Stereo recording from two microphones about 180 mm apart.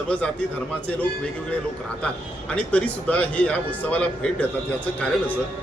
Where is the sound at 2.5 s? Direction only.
5° left (ahead or behind).